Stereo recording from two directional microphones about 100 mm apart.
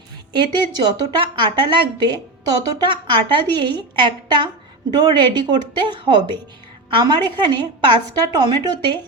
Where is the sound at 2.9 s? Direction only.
50° right (ahead or behind).